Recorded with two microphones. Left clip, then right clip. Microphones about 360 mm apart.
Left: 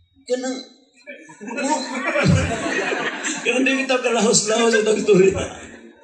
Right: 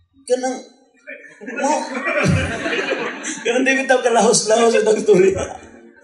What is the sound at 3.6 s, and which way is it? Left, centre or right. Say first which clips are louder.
Speech: right 7 dB; centre.